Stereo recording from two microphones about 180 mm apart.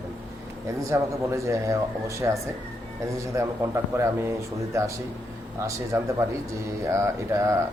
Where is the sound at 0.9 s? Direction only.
15° right (ahead or behind).